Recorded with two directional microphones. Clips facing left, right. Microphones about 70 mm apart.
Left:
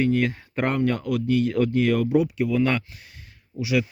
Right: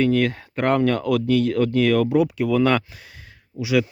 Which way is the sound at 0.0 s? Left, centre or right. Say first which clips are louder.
Right 3 dB; right.